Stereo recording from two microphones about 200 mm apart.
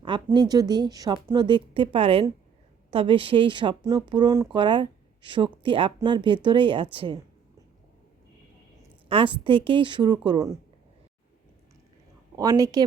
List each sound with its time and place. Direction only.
0.3 s a woman's voice: 20° right (ahead or behind)
9.0 s a woman's voice: 25° right (ahead or behind)
12.4 s a woman's voice: 20° right (ahead or behind)